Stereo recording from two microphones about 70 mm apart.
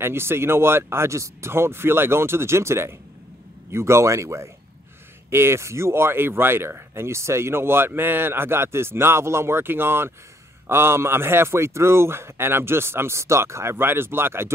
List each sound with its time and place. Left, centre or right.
0.0 s a man's voice: right